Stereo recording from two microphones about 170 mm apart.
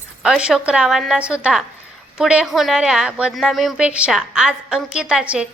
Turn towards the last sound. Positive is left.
turn(degrees=-5)  # may be behind; listen again after turning